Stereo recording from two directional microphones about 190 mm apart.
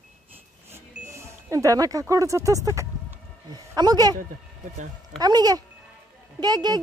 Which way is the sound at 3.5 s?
20° right (ahead or behind).